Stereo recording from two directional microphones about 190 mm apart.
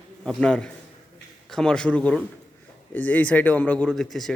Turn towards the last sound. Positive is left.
turn(degrees=0)  # may be behind; listen again after turning